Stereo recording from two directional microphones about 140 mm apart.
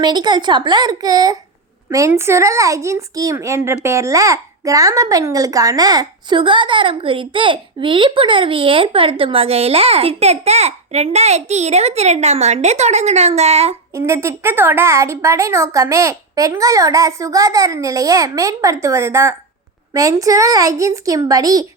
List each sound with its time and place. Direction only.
0.0 s a child's voice: 30° right (ahead or behind); by 13.7 s 50° right (ahead or behind)
13.9 s a woman's voice: 20° right (ahead or behind)